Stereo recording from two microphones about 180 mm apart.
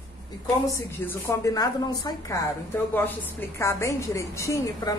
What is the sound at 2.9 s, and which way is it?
A woman's voice, 10° left (ahead or behind).